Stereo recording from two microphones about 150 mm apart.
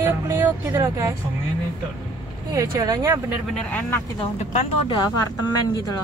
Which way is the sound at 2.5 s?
25° right (ahead or behind).